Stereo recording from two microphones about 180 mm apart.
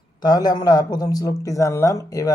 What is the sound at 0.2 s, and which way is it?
Speech, 20° left (ahead or behind).